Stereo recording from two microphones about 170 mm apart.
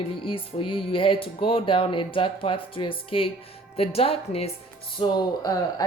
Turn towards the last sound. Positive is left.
turn(degrees=20)  # may be behind; listen again after turning